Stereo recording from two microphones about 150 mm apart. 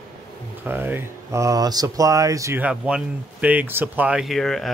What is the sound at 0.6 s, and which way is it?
Speech, 15° right (ahead or behind).